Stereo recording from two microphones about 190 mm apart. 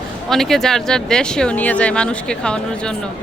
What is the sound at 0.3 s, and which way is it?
Speech, centre (ahead or behind).